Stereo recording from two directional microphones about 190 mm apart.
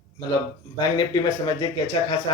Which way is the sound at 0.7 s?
20° left (ahead or behind).